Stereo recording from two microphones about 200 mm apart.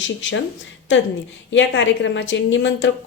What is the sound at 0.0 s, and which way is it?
Speech, 70° left (ahead or behind).